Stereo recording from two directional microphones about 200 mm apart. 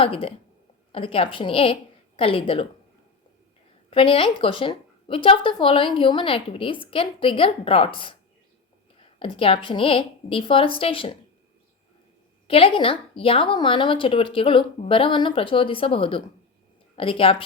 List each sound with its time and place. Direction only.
0.0 s a woman's voice: 25° left (ahead or behind)
3.8 s a woman's voice: 25° left (ahead or behind)
9.1 s a woman's voice: 25° left (ahead or behind)
12.5 s a woman's voice: 25° left (ahead or behind)